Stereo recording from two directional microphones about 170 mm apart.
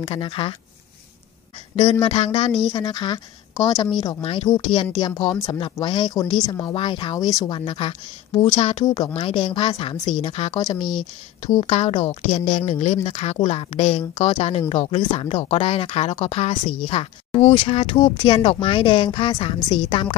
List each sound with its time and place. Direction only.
0.0 s speech: 30° left (ahead or behind)
1.8 s speech: 35° left (ahead or behind)
2.7 s speech: 20° left (ahead or behind)
8.8 s speech: 25° left (ahead or behind)